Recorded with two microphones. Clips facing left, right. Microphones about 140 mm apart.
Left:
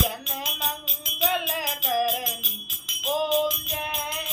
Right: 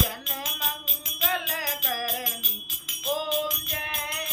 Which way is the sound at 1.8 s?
5° left (ahead or behind).